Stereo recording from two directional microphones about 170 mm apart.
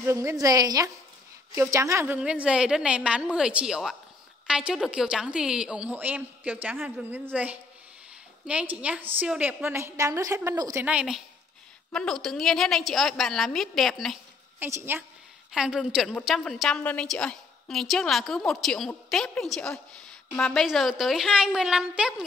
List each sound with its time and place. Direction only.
0.0 s a woman's voice: 15° right (ahead or behind)
2.1 s a woman's voice: 5° right (ahead or behind)
14.6 s a woman's voice: 15° right (ahead or behind)
15.5 s a woman's voice: 5° right (ahead or behind)